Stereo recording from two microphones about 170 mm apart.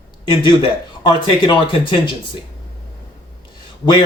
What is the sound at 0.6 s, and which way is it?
Speech, 30° left (ahead or behind).